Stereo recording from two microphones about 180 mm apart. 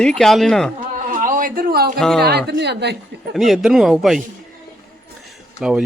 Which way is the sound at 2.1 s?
65° right (ahead or behind).